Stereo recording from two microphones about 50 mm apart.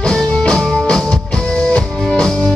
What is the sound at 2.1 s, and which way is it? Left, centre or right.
Music, centre.